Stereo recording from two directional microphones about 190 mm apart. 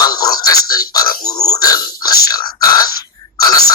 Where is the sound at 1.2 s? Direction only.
20° left (ahead or behind).